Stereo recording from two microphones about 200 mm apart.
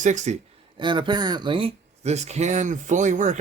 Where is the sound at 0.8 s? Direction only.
25° right (ahead or behind).